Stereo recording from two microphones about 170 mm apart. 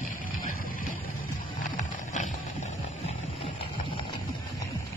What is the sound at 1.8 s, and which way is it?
Horse, 45° left (ahead or behind).